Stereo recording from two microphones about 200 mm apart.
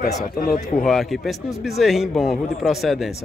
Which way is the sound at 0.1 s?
40° left (ahead or behind).